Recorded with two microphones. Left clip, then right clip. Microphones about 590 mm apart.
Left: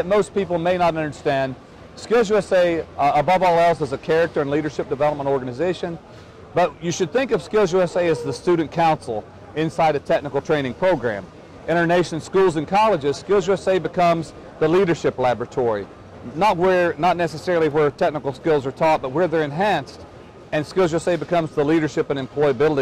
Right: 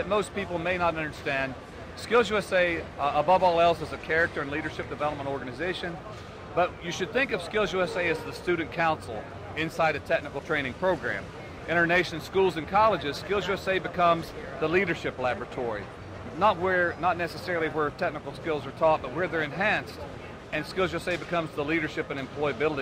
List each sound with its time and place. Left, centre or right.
0.1 s a man's voice: left